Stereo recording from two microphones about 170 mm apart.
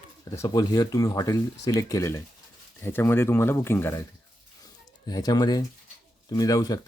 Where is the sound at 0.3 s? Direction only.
20° left (ahead or behind).